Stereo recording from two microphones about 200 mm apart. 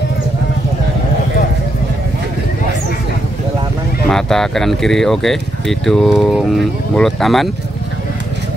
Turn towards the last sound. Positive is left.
turn(degrees=0)  # may be behind; listen again after turning